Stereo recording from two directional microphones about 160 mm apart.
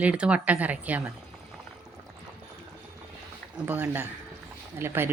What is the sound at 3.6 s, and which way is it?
Speech, 10° right (ahead or behind).